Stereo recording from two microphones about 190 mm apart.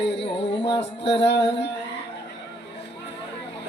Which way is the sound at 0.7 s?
65° left (ahead or behind).